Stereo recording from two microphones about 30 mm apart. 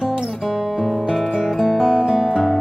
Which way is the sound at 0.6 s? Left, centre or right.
Centre.